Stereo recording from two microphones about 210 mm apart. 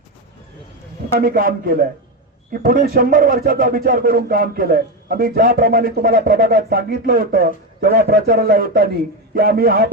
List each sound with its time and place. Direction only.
1.2 s a man's voice: 45° right (ahead or behind)